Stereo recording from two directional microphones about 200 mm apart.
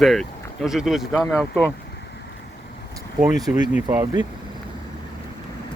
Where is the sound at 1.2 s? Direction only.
15° left (ahead or behind).